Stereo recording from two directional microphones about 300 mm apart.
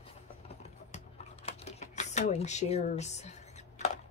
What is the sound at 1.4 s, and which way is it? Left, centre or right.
Typewriter, left.